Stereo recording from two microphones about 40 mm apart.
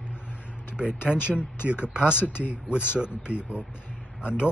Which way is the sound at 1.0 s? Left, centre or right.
Right.